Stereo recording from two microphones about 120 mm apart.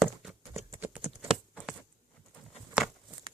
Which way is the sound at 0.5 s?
25° right (ahead or behind).